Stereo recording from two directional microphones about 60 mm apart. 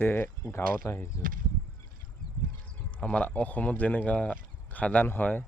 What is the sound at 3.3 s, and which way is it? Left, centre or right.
A man's voice, left.